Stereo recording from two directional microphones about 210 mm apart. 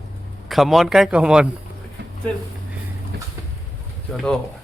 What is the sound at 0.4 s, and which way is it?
Speech, centre (ahead or behind).